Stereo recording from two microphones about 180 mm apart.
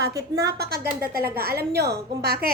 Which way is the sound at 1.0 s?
55° right (ahead or behind).